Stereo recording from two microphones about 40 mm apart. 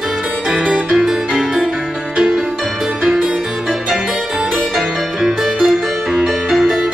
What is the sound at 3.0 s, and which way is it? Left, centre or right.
Music, right.